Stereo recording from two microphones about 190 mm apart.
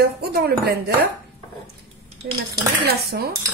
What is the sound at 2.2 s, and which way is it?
A woman's voice, 55° right (ahead or behind).